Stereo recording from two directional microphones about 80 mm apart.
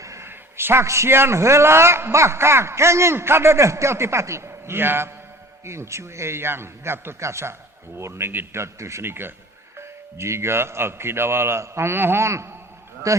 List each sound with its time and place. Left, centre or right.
0.0 s a man's voice: right